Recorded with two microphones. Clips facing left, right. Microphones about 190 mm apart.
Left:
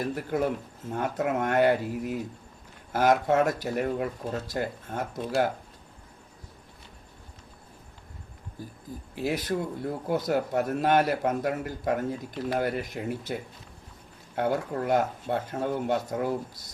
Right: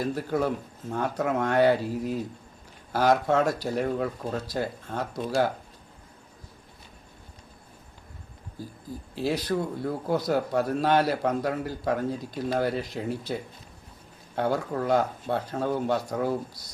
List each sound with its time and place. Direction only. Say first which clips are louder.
0.0 s a man's voice: right 1 dB; 15° left (ahead or behind)
9.1 s a man's voice: right 2 dB; 20° left (ahead or behind)